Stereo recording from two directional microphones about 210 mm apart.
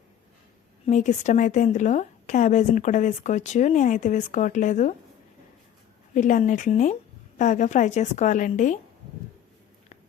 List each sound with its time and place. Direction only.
0.9 s a woman's voice: 35° left (ahead or behind)
6.1 s a woman's voice: 35° left (ahead or behind)